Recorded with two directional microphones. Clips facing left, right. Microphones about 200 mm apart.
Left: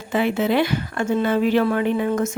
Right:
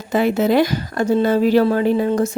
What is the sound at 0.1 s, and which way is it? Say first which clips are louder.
Speech: right 4 dB; 40° right (ahead or behind).